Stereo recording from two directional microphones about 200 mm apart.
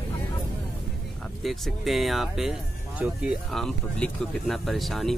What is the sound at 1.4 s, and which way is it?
Speech, centre (ahead or behind).